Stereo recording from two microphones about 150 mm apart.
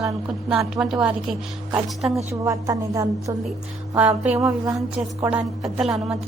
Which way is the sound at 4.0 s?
10° right (ahead or behind).